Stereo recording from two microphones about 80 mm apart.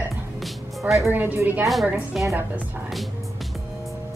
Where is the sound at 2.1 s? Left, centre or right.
Centre.